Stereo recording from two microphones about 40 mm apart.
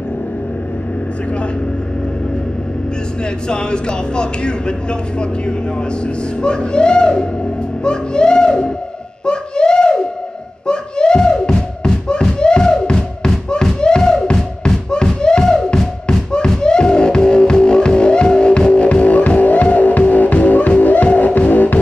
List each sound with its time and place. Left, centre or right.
3.4 s a man's voice: left
6.4 s a man's voice: left
9.2 s a sound: left
11.8 s music: centre
13.7 s a sound: left
15.2 s music: centre; by 21.7 s left